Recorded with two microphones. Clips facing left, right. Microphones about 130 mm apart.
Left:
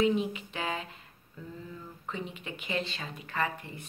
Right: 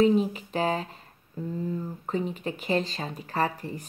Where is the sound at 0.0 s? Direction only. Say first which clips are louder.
Right 5 dB; 40° right (ahead or behind).